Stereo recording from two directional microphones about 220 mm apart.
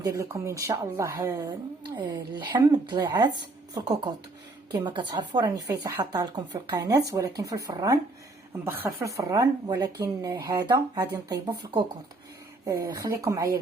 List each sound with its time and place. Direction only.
0.0 s speech: 15° right (ahead or behind)